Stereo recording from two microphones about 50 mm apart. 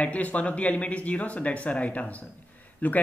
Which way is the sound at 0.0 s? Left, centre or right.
Left.